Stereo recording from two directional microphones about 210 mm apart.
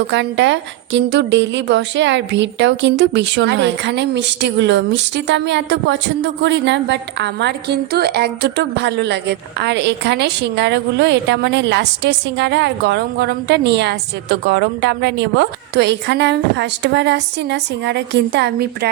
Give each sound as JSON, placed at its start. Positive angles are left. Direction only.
{"t": 0.1, "sound": "a woman's voice", "side_deg": -60}